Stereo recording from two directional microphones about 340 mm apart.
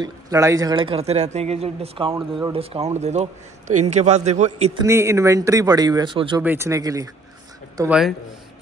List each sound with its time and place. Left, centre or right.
0.0 s a man's voice: centre
4.8 s speech: centre